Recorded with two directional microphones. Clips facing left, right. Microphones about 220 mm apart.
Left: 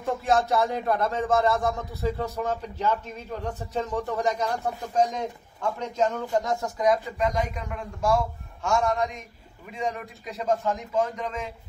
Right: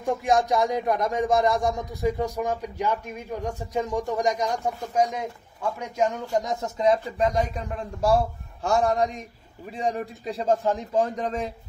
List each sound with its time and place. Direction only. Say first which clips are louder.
0.0 s speech: right 1 dB; 15° right (ahead or behind); by 11.5 s 35° right (ahead or behind)